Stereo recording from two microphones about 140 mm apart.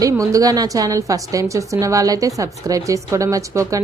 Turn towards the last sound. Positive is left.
turn(degrees=-25)  # may be behind; listen again after turning